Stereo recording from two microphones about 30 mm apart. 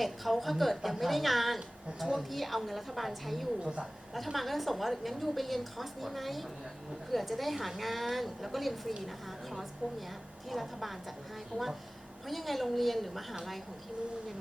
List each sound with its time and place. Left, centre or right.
0.0 s a woman's voice: centre
3.6 s a woman's voice: right
4.1 s a woman's voice: centre
10.5 s a woman's voice: centre